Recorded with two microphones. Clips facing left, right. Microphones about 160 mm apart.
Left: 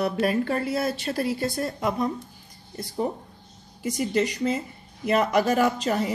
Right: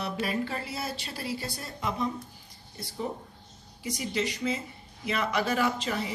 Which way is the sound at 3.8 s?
45° left (ahead or behind).